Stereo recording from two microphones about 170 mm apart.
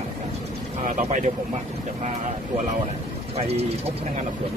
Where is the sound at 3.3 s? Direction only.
35° right (ahead or behind).